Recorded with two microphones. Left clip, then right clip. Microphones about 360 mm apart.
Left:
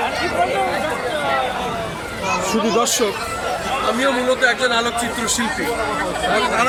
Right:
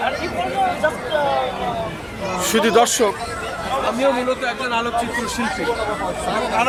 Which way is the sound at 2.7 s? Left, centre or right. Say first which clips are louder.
Right 4 dB; right.